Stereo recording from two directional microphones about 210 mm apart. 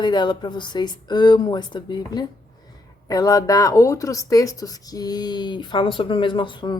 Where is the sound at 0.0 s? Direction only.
20° left (ahead or behind).